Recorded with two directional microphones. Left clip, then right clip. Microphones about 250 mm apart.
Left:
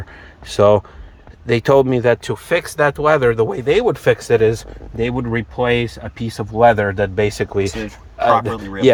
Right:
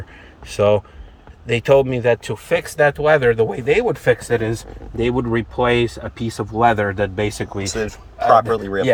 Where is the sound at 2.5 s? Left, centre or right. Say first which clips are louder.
Even; left.